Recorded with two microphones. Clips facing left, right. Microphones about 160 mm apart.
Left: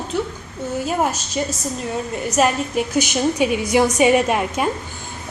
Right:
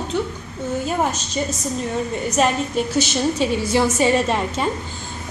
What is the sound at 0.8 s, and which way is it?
Speech, 5° left (ahead or behind).